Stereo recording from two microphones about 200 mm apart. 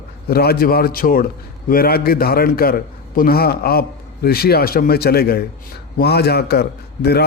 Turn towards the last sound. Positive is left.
turn(degrees=55)  # may be behind; listen again after turning